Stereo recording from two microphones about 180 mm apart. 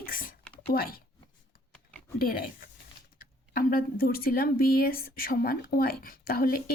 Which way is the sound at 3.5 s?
55° left (ahead or behind).